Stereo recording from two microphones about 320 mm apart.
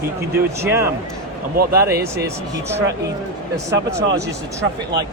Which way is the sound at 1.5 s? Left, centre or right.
Right.